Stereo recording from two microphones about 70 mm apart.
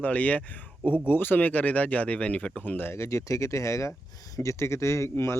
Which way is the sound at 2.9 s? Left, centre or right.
Left.